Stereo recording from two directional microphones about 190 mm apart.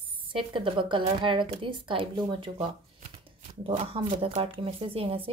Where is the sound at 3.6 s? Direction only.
30° right (ahead or behind).